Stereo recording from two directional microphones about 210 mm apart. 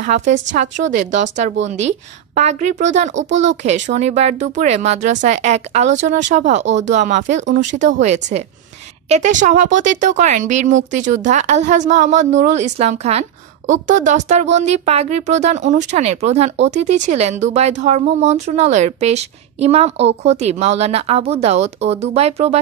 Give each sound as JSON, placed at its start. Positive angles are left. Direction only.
{"t": 0.0, "sound": "a woman's voice", "side_deg": -35}